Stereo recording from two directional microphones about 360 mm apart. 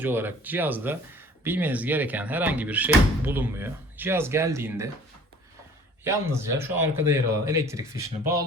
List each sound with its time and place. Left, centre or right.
0.0 s speech: centre
6.1 s speech: centre